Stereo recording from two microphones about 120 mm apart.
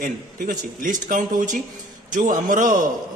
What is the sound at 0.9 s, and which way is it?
A man's voice, 90° right.